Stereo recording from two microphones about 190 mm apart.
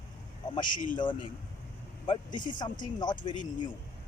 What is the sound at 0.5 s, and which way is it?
Speech, 25° left (ahead or behind).